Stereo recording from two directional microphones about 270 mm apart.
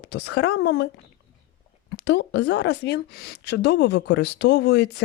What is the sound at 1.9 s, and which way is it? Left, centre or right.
A woman's voice, left.